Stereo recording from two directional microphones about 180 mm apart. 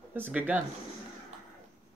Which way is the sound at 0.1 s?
10° right (ahead or behind).